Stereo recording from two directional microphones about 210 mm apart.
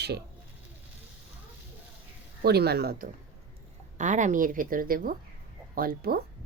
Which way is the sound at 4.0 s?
35° right (ahead or behind).